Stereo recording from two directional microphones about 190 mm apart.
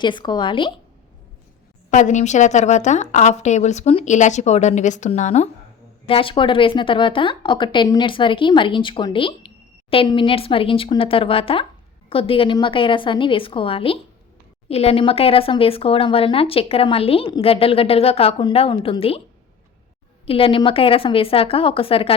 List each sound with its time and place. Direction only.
0.0 s speech: 25° left (ahead or behind)
1.9 s a woman's voice: 40° left (ahead or behind)
20.2 s speech: 30° left (ahead or behind)